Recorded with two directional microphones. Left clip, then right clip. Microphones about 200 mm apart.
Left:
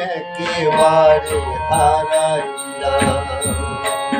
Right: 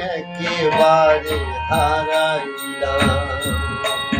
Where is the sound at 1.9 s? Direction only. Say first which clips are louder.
Left 2 dB; 10° left (ahead or behind).